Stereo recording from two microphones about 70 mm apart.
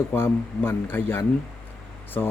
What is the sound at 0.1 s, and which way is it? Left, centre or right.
Speech, left.